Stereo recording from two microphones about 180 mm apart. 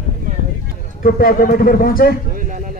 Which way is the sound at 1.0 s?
55° left (ahead or behind).